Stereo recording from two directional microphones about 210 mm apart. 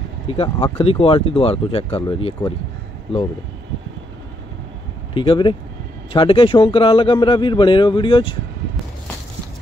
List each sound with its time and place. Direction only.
0.3 s a man's voice: 30° left (ahead or behind)
5.1 s a man's voice: 25° left (ahead or behind)